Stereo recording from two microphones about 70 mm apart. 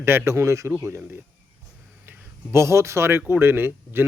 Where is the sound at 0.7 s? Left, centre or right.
Right.